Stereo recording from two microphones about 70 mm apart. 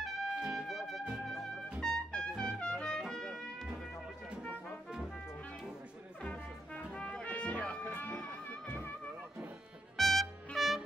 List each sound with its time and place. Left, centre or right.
0.0 s trumpet: centre
7.0 s music: centre
9.9 s trumpet: centre